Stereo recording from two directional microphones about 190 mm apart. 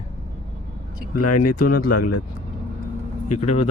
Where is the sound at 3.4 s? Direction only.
30° left (ahead or behind).